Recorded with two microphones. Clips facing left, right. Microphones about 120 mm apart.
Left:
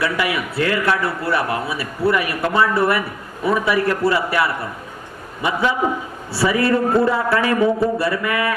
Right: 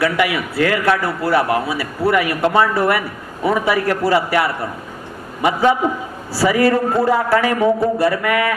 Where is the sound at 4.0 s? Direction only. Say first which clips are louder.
Right 3 dB; 25° right (ahead or behind).